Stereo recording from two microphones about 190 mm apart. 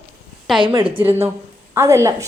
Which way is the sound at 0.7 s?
25° right (ahead or behind).